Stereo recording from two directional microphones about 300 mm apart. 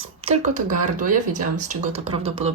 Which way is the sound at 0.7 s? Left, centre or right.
Right.